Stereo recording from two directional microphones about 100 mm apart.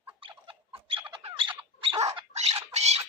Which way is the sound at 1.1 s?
75° right (ahead or behind).